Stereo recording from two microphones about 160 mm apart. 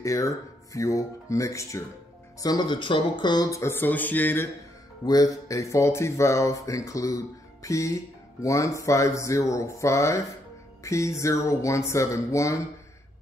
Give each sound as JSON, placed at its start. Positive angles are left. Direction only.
{"t": 0.0, "sound": "speech", "side_deg": 20}
{"t": 5.0, "sound": "speech", "side_deg": 25}